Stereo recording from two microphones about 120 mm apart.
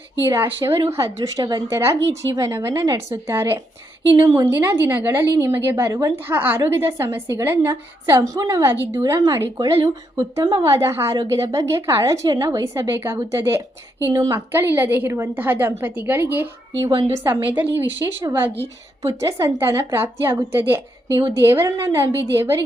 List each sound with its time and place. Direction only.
0.3 s a woman's voice: 20° right (ahead or behind)
6.1 s a woman's voice: 15° right (ahead or behind)
18.0 s a woman's voice: 30° right (ahead or behind)
19.2 s a woman's voice: 20° right (ahead or behind)